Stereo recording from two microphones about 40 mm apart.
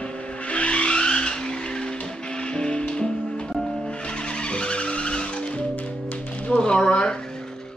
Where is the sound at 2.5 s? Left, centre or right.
Left.